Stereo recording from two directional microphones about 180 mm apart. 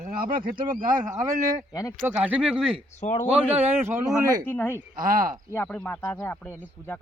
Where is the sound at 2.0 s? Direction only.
10° right (ahead or behind).